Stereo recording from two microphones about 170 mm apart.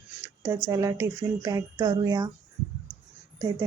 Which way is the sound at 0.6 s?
20° right (ahead or behind).